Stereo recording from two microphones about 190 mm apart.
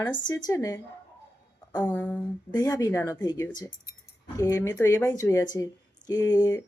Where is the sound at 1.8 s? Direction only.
5° left (ahead or behind).